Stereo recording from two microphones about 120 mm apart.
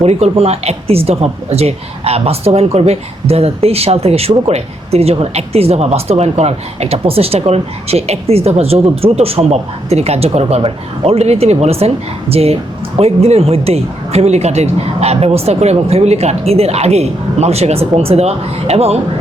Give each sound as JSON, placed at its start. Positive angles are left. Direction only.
{"t": 0.0, "sound": "speech", "side_deg": -60}